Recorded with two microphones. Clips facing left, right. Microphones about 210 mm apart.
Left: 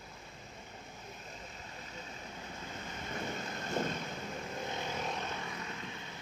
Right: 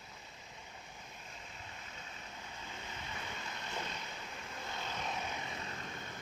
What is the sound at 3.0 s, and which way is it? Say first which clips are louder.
Vehicle: left 9 dB; 45° left (ahead or behind).